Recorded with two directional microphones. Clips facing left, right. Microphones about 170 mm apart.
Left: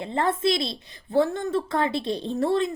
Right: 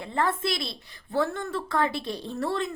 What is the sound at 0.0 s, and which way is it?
A woman's voice, 25° left (ahead or behind).